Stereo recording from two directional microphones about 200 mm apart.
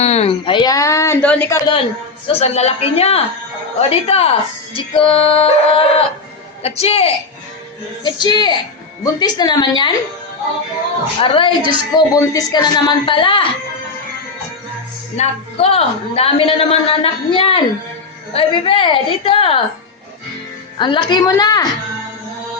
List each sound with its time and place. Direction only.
0.0 s speech: 30° left (ahead or behind); by 1.5 s 5° left (ahead or behind)
2.2 s a woman's voice: 30° left (ahead or behind)
11.2 s a woman's voice: 25° left (ahead or behind)
11.6 s speech: 25° right (ahead or behind)
11.9 s a woman's voice: 15° left (ahead or behind)
15.1 s a woman's voice: 30° left (ahead or behind)
20.7 s a woman's voice: 25° left (ahead or behind)